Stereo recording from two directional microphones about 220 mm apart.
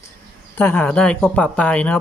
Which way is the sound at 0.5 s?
5° left (ahead or behind).